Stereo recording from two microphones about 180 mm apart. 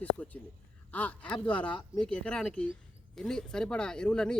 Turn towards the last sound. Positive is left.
turn(degrees=5)  # may be behind; listen again after turning